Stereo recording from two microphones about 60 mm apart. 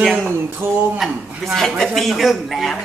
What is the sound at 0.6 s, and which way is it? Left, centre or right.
Speech, right.